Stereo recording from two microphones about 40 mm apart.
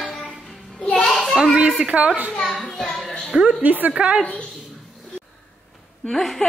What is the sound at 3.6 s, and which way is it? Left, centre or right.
Speech, right.